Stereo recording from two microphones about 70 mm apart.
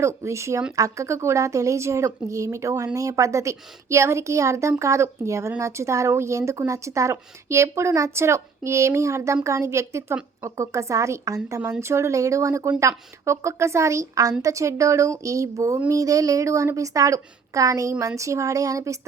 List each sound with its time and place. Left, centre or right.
0.0 s speech: right